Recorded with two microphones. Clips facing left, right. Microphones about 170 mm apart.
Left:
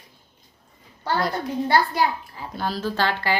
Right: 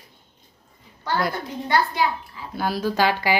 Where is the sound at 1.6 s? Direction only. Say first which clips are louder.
Even; 40° left (ahead or behind).